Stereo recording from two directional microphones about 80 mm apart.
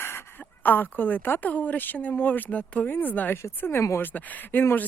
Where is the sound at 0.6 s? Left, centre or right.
Left.